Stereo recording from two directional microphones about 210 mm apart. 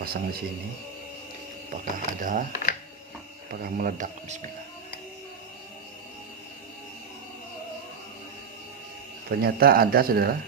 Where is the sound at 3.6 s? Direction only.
40° right (ahead or behind).